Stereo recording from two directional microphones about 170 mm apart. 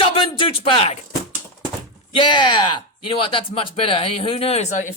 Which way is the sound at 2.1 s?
30° left (ahead or behind).